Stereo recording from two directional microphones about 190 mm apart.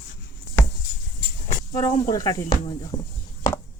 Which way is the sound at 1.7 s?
20° left (ahead or behind).